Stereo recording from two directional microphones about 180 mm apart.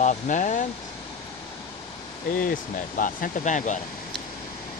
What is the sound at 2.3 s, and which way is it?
Speech, 50° left (ahead or behind).